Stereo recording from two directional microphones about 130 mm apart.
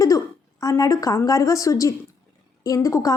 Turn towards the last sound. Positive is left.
turn(degrees=25)  # may be behind; listen again after turning